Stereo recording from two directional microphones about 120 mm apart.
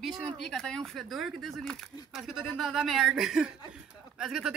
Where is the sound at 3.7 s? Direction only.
5° right (ahead or behind).